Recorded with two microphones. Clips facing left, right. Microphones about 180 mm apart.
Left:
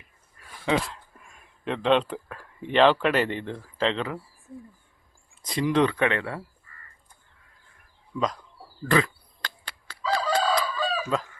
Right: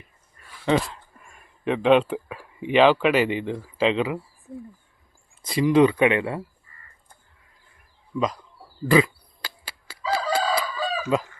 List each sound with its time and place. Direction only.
0.6 s speech: centre (ahead or behind)
8.1 s speech: centre (ahead or behind)
8.8 s chicken: 10° right (ahead or behind)